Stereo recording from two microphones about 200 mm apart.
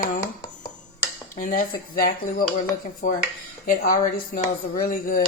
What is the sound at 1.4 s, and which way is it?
A woman's voice, 45° left (ahead or behind).